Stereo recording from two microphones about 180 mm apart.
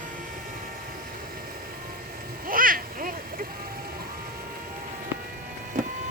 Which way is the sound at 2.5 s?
50° right (ahead or behind).